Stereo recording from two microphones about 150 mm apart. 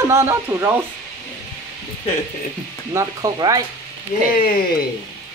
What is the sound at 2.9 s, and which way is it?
Speech, 25° right (ahead or behind).